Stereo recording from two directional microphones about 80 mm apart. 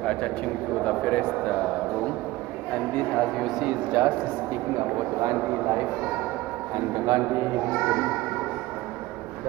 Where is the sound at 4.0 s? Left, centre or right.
Right.